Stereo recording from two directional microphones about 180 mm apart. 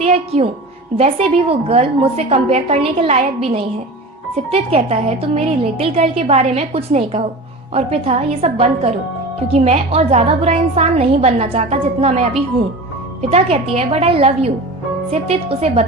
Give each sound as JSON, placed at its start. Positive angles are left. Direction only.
{"t": 0.0, "sound": "a woman's voice", "side_deg": -35}
{"t": 13.3, "sound": "a woman's voice", "side_deg": -35}